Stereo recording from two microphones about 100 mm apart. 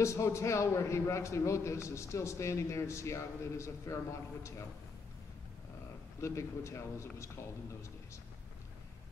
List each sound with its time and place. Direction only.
0.0 s a man's voice: 30° left (ahead or behind)
6.2 s a man's voice: 30° left (ahead or behind)